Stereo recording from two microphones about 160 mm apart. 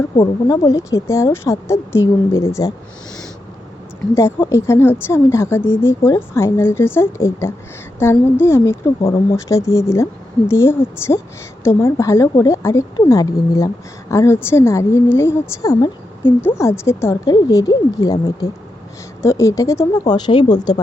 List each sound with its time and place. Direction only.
0.2 s a woman's voice: 30° left (ahead or behind)
4.1 s a woman's voice: 15° left (ahead or behind)